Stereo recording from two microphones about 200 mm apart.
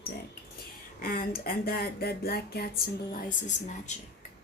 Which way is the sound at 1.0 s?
45° left (ahead or behind).